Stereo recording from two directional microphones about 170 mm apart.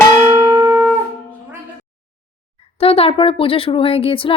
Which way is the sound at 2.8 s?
35° left (ahead or behind).